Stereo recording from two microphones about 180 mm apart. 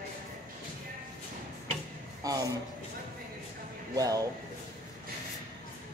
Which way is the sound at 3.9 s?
20° right (ahead or behind).